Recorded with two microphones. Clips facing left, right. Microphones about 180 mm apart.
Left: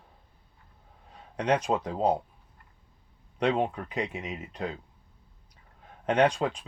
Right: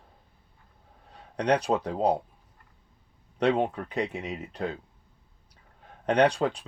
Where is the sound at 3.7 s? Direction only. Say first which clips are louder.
Right 2 dB; 35° right (ahead or behind).